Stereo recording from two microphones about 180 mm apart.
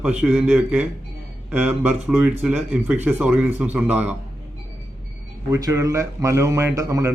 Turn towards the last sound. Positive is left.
turn(degrees=-15)  # may be behind; listen again after turning